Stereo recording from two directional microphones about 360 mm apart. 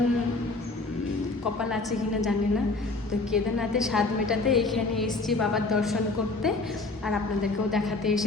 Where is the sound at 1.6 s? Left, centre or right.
Centre.